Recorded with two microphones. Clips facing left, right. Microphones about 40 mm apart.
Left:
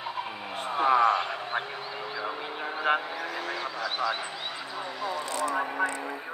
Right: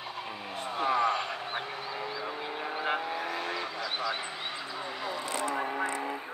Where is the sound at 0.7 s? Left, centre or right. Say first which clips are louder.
Left 5 dB; centre.